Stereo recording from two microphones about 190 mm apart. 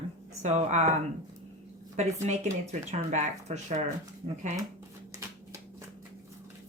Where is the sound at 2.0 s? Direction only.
35° right (ahead or behind).